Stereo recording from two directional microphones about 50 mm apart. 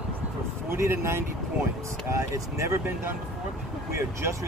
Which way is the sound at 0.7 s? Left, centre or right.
Right.